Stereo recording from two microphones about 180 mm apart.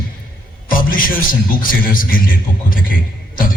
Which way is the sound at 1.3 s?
50° left (ahead or behind).